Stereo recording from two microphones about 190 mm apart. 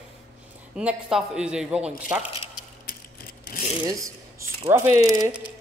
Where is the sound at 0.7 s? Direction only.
5° right (ahead or behind).